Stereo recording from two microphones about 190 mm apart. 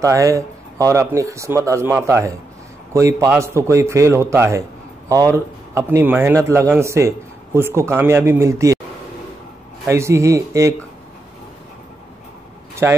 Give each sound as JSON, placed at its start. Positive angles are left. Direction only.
{"t": 0.0, "sound": "a man's voice", "side_deg": -15}
{"t": 9.8, "sound": "a man's voice", "side_deg": -15}
{"t": 12.8, "sound": "a man's voice", "side_deg": -15}